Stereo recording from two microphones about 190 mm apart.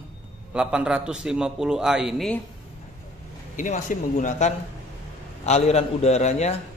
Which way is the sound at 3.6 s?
40° left (ahead or behind).